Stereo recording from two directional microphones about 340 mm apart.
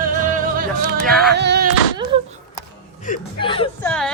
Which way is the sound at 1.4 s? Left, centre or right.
Right.